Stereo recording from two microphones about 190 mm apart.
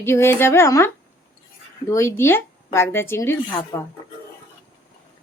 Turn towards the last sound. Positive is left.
turn(degrees=20)  # may be behind; listen again after turning